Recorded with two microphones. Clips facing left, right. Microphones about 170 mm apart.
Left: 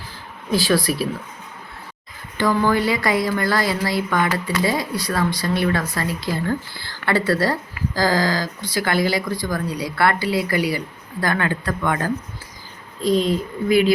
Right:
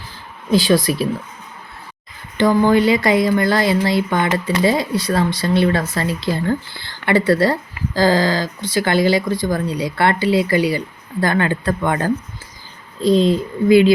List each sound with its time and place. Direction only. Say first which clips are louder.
0.5 s speech: right 4 dB; 20° right (ahead or behind)
2.4 s speech: right 5 dB; 20° right (ahead or behind)